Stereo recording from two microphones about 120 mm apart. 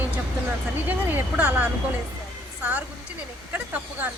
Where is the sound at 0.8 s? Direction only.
15° right (ahead or behind).